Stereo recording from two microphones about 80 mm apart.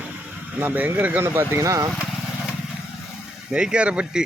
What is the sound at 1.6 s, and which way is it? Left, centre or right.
Speech, right.